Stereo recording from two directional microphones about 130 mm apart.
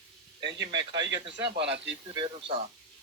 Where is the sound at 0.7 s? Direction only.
30° right (ahead or behind).